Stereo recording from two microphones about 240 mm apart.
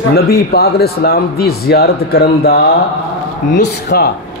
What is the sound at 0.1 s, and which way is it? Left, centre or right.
Speech, left.